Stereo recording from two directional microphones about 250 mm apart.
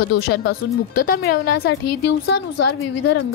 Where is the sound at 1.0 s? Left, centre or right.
Left.